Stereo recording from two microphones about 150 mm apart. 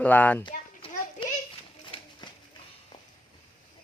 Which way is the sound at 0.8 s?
40° left (ahead or behind).